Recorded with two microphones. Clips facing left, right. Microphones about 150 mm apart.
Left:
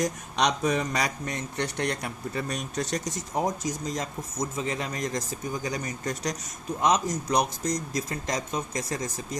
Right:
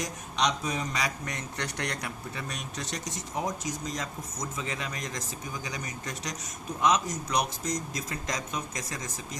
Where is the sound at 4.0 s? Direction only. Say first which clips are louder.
Left 5 dB; 35° left (ahead or behind).